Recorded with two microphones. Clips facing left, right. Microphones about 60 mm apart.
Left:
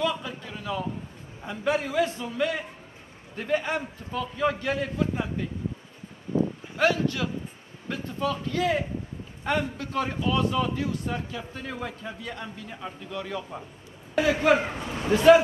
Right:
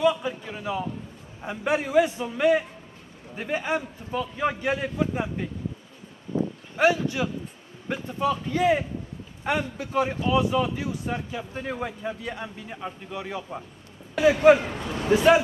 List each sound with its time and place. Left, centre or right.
0.0 s a man's voice: centre
6.8 s a man's voice: centre